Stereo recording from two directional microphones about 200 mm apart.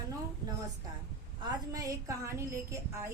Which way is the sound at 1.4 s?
20° right (ahead or behind).